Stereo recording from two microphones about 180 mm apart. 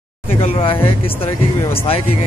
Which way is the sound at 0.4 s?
30° left (ahead or behind).